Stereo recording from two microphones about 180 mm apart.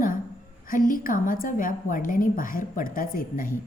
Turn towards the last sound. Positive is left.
turn(degrees=50)  # may be behind; listen again after turning